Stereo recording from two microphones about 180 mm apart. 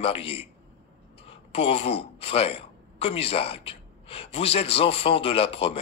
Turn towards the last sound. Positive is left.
turn(degrees=30)  # may be behind; listen again after turning